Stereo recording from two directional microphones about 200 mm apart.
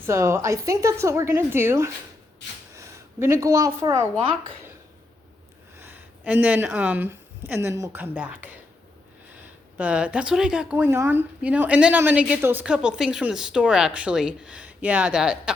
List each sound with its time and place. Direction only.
0.0 s a woman's voice: 15° right (ahead or behind)
5.7 s speech: 10° right (ahead or behind)
9.7 s a woman's voice: 5° right (ahead or behind)